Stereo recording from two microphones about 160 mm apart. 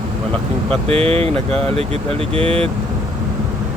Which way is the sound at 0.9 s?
40° right (ahead or behind).